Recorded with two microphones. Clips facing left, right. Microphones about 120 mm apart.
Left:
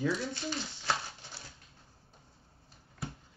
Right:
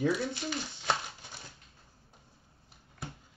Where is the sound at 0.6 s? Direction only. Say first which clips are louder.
Right 2 dB; 20° right (ahead or behind).